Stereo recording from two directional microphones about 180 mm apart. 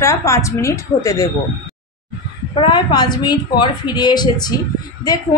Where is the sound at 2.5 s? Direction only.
25° left (ahead or behind).